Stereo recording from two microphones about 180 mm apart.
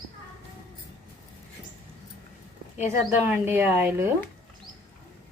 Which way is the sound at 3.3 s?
10° right (ahead or behind).